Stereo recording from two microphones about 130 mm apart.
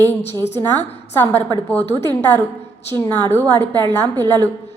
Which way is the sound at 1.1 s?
20° left (ahead or behind).